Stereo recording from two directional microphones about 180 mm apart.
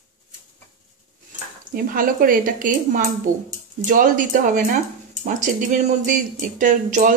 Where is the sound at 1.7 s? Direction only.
50° right (ahead or behind).